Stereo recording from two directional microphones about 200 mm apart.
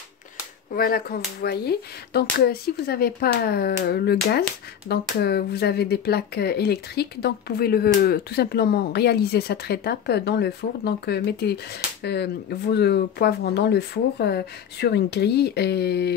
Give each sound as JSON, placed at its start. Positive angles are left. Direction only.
{"t": 0.7, "sound": "speech", "side_deg": 50}